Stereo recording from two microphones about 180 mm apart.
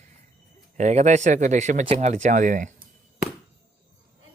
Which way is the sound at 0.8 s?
40° right (ahead or behind).